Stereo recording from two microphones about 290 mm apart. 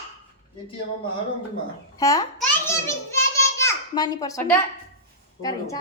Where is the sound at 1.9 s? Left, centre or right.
Centre.